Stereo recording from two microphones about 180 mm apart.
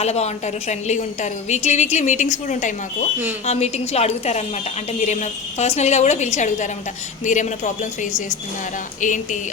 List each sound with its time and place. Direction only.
0.0 s a woman's voice: 35° left (ahead or behind)
9.0 s a man's voice: 45° left (ahead or behind)